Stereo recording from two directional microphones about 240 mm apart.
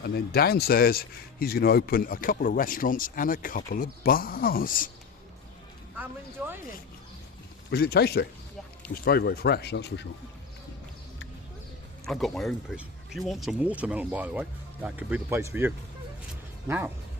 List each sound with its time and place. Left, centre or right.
0.0 s speech: left
7.7 s speech: left
12.0 s speech: centre